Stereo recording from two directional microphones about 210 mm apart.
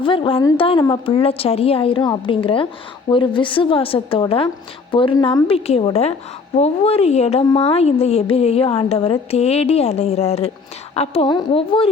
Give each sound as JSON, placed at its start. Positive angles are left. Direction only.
{"t": 0.0, "sound": "a woman's voice", "side_deg": 25}